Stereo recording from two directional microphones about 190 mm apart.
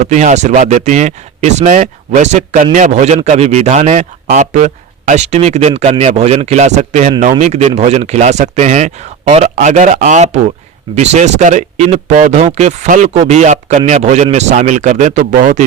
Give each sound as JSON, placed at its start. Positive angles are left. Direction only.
{"t": 0.0, "sound": "speech", "side_deg": -40}